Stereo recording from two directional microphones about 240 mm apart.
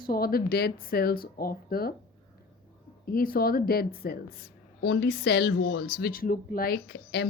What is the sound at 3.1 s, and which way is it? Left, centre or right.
A woman's voice, left.